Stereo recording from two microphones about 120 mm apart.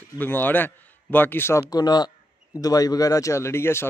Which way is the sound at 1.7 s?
35° left (ahead or behind).